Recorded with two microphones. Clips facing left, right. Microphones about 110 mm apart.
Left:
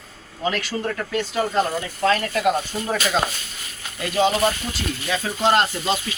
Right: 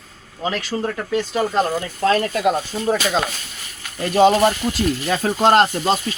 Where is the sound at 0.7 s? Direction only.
20° right (ahead or behind).